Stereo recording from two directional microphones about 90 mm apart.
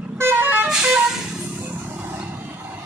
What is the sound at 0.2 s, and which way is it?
Vehicle, 25° right (ahead or behind).